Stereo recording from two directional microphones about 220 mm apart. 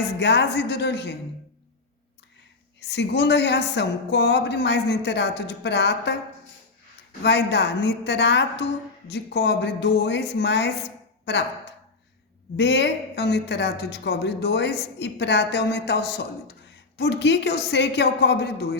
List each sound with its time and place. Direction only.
0.2 s a woman's voice: 50° left (ahead or behind)
2.8 s a woman's voice: 50° left (ahead or behind)
7.2 s a woman's voice: 50° left (ahead or behind)
12.5 s a woman's voice: 50° left (ahead or behind)